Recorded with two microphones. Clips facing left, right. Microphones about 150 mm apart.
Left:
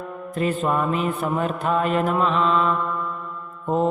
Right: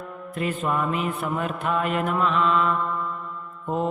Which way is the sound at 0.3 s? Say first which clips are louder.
Left 3 dB; 35° left (ahead or behind).